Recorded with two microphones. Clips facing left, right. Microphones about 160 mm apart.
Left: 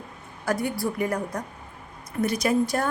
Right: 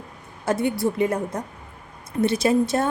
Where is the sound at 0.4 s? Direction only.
25° right (ahead or behind).